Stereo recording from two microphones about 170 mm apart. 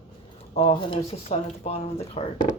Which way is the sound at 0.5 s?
30° left (ahead or behind).